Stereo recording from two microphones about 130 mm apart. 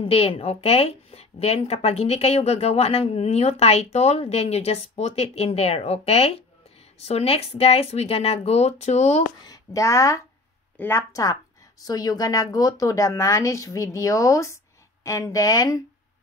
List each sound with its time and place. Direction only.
0.0 s a woman's voice: 45° left (ahead or behind)
9.5 s a woman's voice: 25° left (ahead or behind)